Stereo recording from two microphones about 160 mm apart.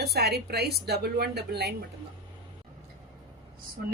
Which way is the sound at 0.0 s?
80° right.